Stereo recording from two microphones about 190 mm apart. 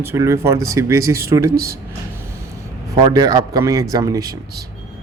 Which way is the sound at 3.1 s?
20° right (ahead or behind).